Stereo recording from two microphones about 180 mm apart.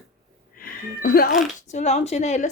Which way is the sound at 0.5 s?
55° left (ahead or behind).